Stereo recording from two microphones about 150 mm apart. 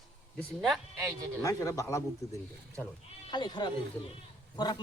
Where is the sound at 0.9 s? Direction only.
20° right (ahead or behind).